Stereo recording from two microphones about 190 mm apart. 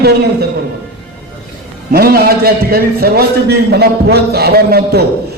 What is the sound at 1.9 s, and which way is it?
A man's voice, 55° right (ahead or behind).